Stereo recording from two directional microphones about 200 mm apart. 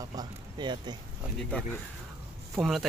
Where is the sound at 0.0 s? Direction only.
20° right (ahead or behind).